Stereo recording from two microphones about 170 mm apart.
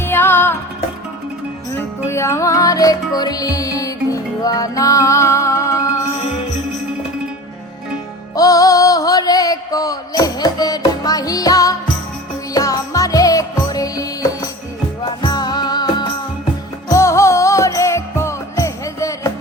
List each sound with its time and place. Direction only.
0.0 s music: 15° left (ahead or behind)
2.0 s music: 15° left (ahead or behind)
8.4 s music: 20° left (ahead or behind)